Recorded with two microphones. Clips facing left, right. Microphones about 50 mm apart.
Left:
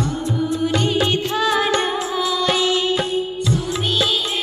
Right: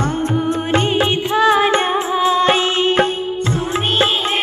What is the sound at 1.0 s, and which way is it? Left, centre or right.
Music, right.